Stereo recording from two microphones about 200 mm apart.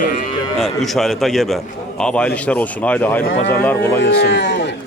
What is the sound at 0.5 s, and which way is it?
A man's voice, centre (ahead or behind).